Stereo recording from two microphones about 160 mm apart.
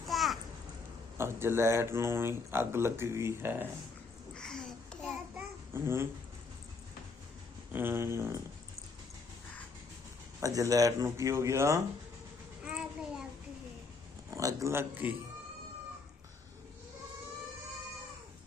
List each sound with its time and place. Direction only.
0.1 s babbling: centre (ahead or behind)
1.2 s speech: 15° right (ahead or behind)
4.4 s a sound: 5° left (ahead or behind)
5.3 s babbling: 15° right (ahead or behind)
7.7 s speech: 15° right (ahead or behind)
10.4 s speech: 20° right (ahead or behind)
12.6 s a sound: 5° right (ahead or behind)
14.3 s speech: 20° right (ahead or behind)